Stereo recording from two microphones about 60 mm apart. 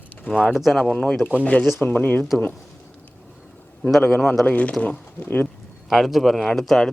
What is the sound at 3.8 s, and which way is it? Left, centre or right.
Speech, centre.